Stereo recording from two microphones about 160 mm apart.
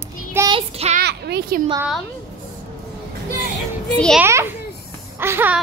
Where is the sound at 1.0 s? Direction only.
90° right.